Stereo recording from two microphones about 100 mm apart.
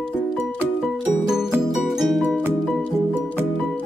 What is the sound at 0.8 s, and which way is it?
Music, 5° right (ahead or behind).